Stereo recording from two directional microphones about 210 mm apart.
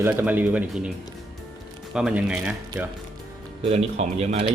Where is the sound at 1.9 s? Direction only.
5° right (ahead or behind).